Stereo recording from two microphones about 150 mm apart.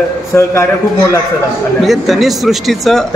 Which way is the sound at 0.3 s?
20° left (ahead or behind).